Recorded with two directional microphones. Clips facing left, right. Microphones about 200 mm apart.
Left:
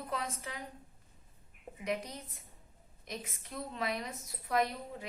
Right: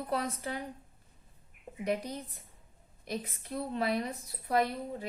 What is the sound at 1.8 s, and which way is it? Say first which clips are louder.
A woman's voice: right 4 dB; 30° right (ahead or behind).